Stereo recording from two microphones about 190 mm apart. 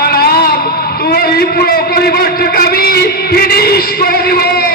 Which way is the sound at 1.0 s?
55° left (ahead or behind).